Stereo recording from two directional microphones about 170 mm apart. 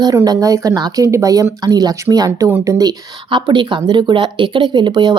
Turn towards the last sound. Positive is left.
turn(degrees=-25)  # may be behind; listen again after turning